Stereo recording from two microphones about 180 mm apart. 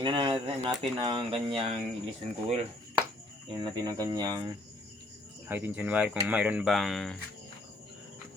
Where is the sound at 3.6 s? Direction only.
25° right (ahead or behind).